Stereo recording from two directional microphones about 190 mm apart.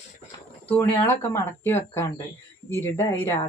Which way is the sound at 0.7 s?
10° left (ahead or behind).